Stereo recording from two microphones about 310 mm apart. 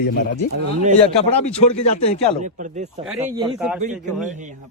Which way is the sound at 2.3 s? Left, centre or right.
Right.